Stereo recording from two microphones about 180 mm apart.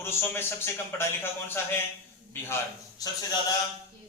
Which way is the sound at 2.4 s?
15° left (ahead or behind).